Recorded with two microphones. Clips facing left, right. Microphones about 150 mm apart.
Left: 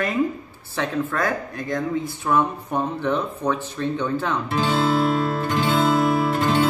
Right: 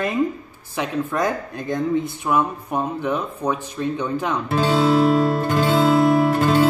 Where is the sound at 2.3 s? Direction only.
10° right (ahead or behind).